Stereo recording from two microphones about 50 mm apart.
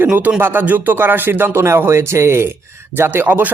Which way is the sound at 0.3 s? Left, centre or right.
Right.